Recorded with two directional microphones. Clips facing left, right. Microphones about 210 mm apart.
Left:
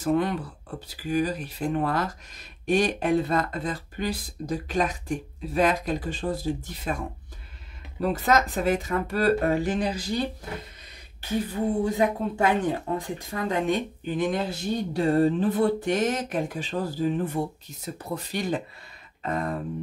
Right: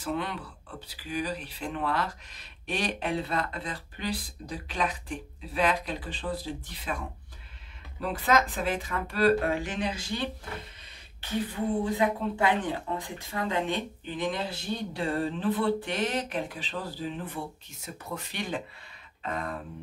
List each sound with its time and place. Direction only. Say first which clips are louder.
0.0 s speech: left 8 dB; 45° left (ahead or behind)
8.0 s speech: left 3 dB; 45° left (ahead or behind)
12.4 s speech: left 6 dB; 40° left (ahead or behind)
19.2 s a sound: left 5 dB; 40° left (ahead or behind)